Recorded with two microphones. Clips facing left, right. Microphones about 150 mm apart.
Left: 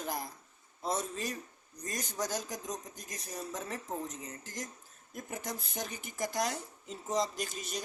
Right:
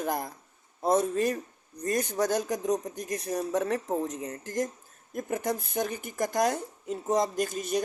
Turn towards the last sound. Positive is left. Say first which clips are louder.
# right 11 dB
turn(degrees=-55)  # may be behind; listen again after turning